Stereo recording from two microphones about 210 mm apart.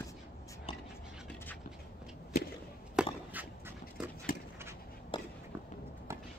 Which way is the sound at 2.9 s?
5° right (ahead or behind).